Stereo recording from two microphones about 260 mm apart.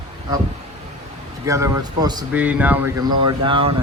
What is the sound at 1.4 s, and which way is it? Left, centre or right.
Speech, centre.